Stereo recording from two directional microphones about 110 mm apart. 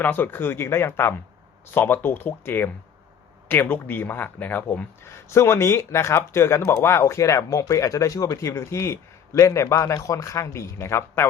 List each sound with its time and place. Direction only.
0.0 s speech: 15° left (ahead or behind)
5.3 s speech: 25° left (ahead or behind)